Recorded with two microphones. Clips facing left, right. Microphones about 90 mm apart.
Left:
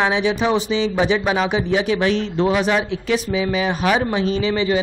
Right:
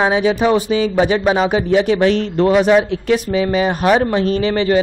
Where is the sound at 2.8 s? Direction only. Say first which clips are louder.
Right 4 dB; 50° right (ahead or behind).